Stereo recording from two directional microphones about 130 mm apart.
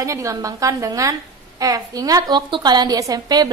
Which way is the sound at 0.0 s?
25° right (ahead or behind).